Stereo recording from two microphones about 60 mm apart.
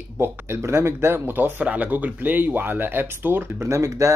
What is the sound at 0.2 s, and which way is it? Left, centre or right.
Speech, right.